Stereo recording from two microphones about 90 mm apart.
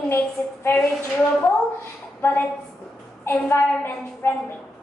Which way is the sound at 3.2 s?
25° left (ahead or behind).